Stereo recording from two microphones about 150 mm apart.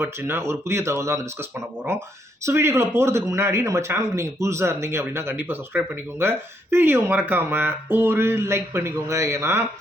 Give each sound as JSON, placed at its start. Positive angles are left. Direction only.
{"t": 0.0, "sound": "speech", "side_deg": -15}
{"t": 2.4, "sound": "speech", "side_deg": -15}